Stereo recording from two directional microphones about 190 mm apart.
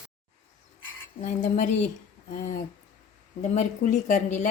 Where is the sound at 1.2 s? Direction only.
40° left (ahead or behind).